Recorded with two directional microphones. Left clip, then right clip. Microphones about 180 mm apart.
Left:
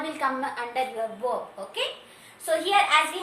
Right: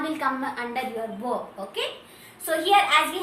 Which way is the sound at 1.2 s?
15° left (ahead or behind).